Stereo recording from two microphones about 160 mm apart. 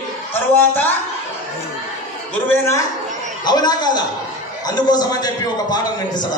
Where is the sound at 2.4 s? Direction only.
15° left (ahead or behind).